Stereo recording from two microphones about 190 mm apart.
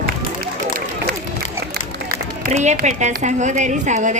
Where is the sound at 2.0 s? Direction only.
40° right (ahead or behind).